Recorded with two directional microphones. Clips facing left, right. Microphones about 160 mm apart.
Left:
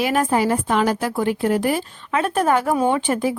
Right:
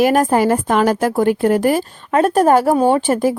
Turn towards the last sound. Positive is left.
turn(degrees=-40)  # may be behind; listen again after turning